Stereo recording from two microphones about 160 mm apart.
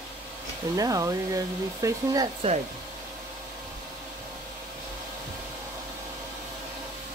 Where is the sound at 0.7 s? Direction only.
20° right (ahead or behind).